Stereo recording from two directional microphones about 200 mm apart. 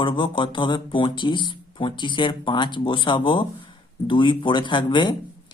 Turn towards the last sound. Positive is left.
turn(degrees=25)  # may be behind; listen again after turning